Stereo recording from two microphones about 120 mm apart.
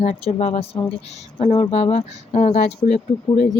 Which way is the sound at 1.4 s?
50° left (ahead or behind).